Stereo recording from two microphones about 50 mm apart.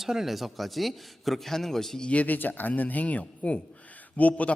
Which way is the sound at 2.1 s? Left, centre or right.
Left.